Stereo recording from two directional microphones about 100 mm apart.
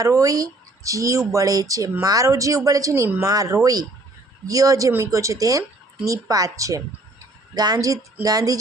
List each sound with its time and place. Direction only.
0.0 s speech: 35° right (ahead or behind)